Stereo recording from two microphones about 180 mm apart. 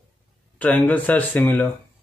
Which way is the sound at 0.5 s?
10° left (ahead or behind).